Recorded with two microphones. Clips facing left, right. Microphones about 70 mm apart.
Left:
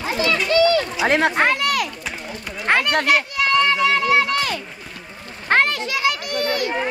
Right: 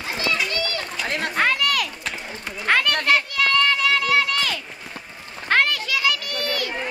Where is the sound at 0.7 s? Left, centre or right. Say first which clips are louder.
Left 9 dB; left.